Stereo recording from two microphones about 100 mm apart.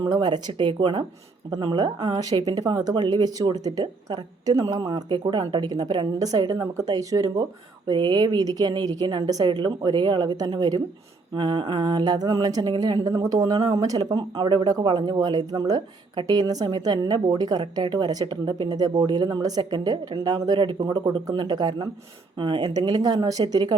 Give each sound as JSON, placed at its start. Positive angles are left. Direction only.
{"t": 0.0, "sound": "speech", "side_deg": -45}
{"t": 14.3, "sound": "speech", "side_deg": -50}